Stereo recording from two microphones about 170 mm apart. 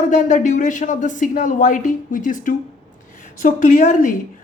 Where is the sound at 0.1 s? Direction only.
45° left (ahead or behind).